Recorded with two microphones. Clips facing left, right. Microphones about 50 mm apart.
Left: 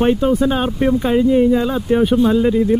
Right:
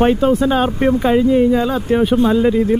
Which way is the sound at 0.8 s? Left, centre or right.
Centre.